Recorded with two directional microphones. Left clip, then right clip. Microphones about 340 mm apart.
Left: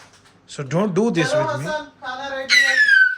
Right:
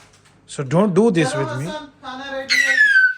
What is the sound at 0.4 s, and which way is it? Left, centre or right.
Speech, centre.